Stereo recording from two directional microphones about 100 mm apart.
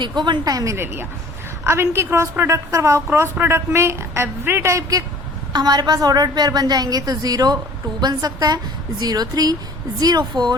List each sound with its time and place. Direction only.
0.0 s a woman's voice: 50° right (ahead or behind); by 5.0 s 35° right (ahead or behind)
5.5 s a woman's voice: 45° right (ahead or behind)